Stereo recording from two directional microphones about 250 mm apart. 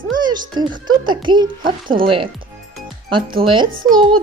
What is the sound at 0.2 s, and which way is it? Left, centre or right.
A child's voice, centre.